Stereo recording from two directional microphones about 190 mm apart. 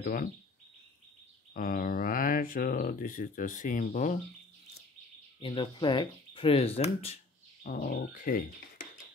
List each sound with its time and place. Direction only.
0.0 s speech: 45° left (ahead or behind)
1.5 s speech: 50° left (ahead or behind)
5.4 s speech: 25° left (ahead or behind)
7.6 s speech: 50° left (ahead or behind)